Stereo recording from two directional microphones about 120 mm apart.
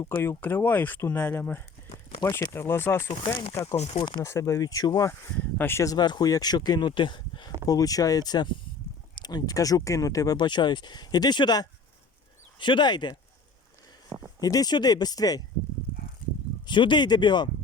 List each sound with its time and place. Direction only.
0.1 s speech: 20° left (ahead or behind)
3.1 s speech: 40° left (ahead or behind)
4.2 s speech: 25° left (ahead or behind)
5.4 s speech: 15° left (ahead or behind); by 7.5 s 40° left (ahead or behind)
7.7 s speech: 30° left (ahead or behind)
14.1 s a sound: 25° right (ahead or behind)
14.4 s speech: 30° left (ahead or behind)
16.6 s speech: 40° left (ahead or behind)